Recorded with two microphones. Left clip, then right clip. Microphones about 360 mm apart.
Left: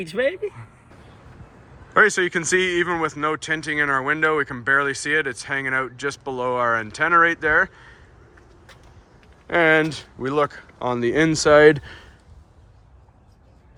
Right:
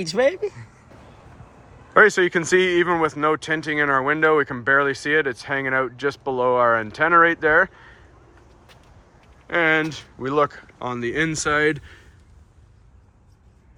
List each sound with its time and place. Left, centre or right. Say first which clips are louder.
0.3 s speech: right 3 dB; right
1.9 s speech: right 2 dB; centre
9.5 s speech: left 2 dB; centre